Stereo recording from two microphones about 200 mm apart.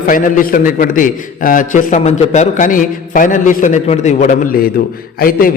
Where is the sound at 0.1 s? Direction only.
45° left (ahead or behind).